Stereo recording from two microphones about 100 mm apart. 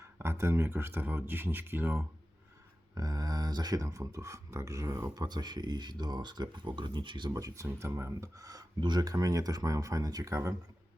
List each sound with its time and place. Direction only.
0.0 s speech: 25° right (ahead or behind)
2.9 s speech: 40° right (ahead or behind)
7.3 s speech: 35° right (ahead or behind)